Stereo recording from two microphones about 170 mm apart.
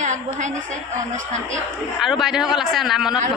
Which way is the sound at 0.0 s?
45° right (ahead or behind).